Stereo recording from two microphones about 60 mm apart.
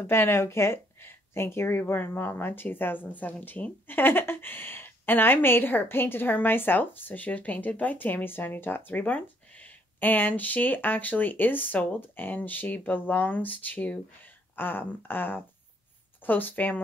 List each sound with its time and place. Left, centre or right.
0.0 s speech: left
9.0 s speech: left